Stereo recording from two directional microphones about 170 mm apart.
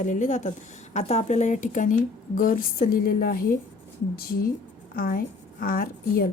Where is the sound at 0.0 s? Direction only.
45° left (ahead or behind).